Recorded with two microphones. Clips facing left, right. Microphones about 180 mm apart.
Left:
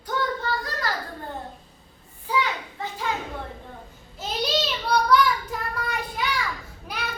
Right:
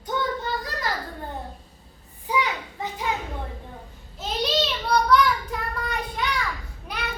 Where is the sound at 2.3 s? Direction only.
15° right (ahead or behind).